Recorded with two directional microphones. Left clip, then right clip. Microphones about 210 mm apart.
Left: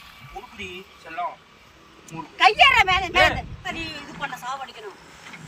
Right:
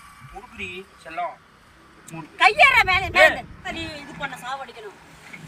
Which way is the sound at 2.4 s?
10° right (ahead or behind).